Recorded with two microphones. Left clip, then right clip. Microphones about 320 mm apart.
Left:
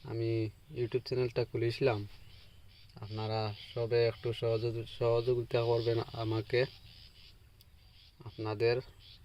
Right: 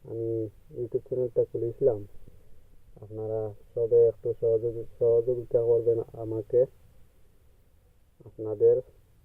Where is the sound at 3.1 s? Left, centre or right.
Left.